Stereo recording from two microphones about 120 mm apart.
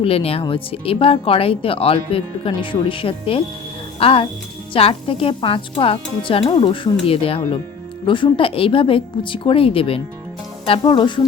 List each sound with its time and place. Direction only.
0.0 s speech: 55° left (ahead or behind)